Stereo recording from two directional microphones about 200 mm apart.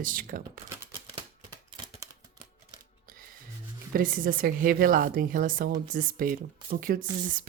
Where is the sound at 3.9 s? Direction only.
45° right (ahead or behind).